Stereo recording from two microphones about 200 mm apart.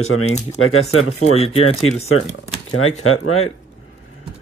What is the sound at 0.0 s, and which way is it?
Speech, 90° left.